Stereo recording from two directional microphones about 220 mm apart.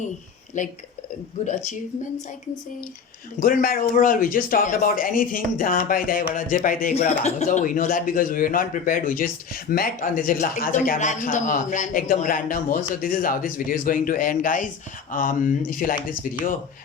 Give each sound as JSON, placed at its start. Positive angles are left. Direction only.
{"t": 0.6, "sound": "speech", "side_deg": 35}
{"t": 3.4, "sound": "speech", "side_deg": 40}